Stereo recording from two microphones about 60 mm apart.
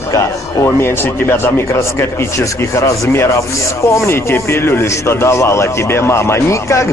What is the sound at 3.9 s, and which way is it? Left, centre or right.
A man's voice, left.